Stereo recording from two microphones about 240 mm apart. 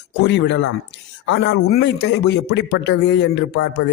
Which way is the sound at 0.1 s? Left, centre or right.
Left.